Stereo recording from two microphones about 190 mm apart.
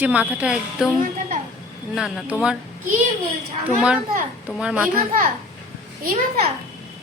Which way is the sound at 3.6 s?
5° right (ahead or behind).